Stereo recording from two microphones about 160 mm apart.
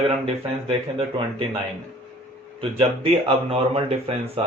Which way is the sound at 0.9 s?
35° right (ahead or behind).